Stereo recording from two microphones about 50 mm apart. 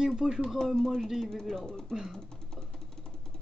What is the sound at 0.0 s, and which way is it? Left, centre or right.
Speech, centre.